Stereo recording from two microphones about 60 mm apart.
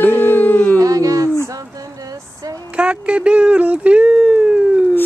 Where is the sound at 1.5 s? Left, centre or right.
Right.